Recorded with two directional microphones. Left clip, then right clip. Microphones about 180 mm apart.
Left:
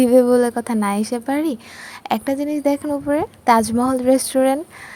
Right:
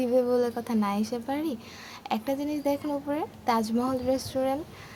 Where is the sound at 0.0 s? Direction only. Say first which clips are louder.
Left 11 dB; 45° left (ahead or behind).